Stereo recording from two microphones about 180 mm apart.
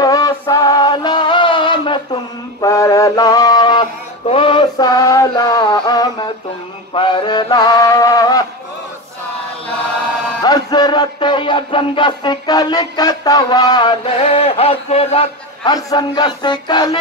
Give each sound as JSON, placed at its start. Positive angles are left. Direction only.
{"t": 0.0, "sound": "music", "side_deg": 20}
{"t": 2.6, "sound": "mantra", "side_deg": 15}
{"t": 4.3, "sound": "music", "side_deg": 30}
{"t": 6.9, "sound": "mantra", "side_deg": 30}
{"t": 10.4, "sound": "music", "side_deg": 20}
{"t": 15.7, "sound": "music", "side_deg": 20}